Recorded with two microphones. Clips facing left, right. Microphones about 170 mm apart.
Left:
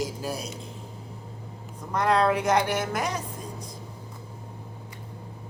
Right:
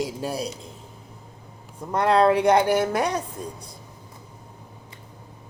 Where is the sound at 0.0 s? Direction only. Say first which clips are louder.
Right 3 dB; 30° right (ahead or behind).